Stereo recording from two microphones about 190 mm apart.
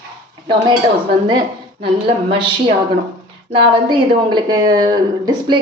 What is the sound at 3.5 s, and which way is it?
Speech, 25° right (ahead or behind).